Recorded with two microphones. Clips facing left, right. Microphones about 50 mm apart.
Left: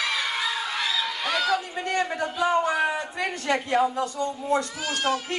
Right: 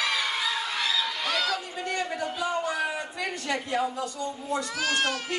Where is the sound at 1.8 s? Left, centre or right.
Left.